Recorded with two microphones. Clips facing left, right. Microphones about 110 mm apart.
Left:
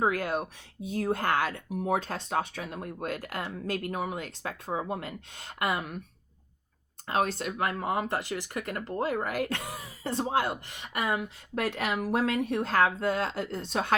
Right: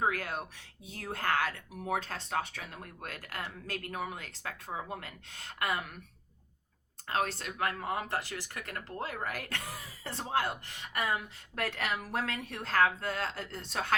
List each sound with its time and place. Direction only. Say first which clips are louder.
0.1 s speech: left 6 dB; 20° left (ahead or behind)
7.1 s speech: left 5 dB; 20° left (ahead or behind)